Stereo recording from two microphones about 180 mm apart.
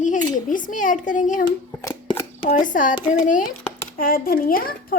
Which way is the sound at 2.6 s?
45° left (ahead or behind).